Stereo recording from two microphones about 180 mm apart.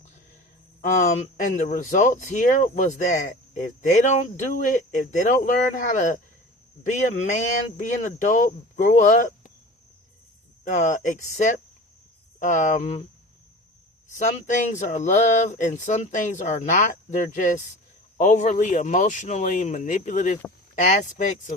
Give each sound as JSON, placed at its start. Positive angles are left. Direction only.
{"t": 0.8, "sound": "a man's voice", "side_deg": 40}
{"t": 10.6, "sound": "speech", "side_deg": 45}
{"t": 14.2, "sound": "speech", "side_deg": 45}